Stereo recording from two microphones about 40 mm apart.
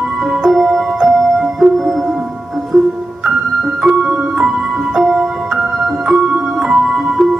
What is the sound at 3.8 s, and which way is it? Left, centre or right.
Music, centre.